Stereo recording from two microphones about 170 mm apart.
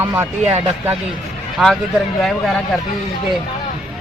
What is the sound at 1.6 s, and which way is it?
Speech, centre (ahead or behind).